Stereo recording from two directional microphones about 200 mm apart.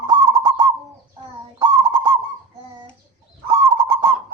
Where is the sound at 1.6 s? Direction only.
20° right (ahead or behind).